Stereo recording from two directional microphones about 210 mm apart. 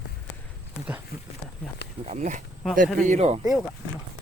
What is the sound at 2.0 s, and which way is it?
Speech, 35° right (ahead or behind).